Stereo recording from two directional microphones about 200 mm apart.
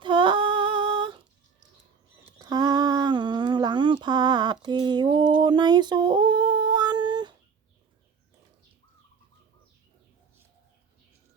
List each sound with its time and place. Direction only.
0.0 s female singing: 25° right (ahead or behind)
2.4 s humming: 20° right (ahead or behind)
4.6 s a sound: 20° right (ahead or behind)